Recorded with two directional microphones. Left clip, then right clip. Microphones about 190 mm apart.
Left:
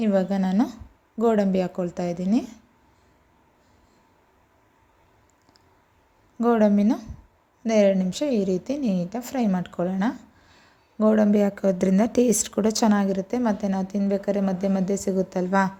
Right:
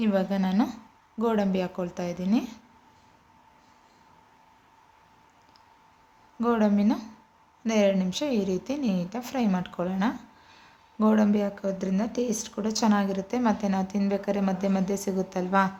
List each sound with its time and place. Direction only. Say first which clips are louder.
0.0 s speech: left 3 dB; 20° left (ahead or behind)
6.4 s speech: left 5 dB; 25° left (ahead or behind)